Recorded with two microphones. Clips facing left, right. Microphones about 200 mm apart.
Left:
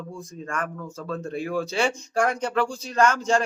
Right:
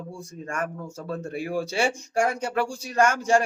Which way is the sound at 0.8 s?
30° right (ahead or behind).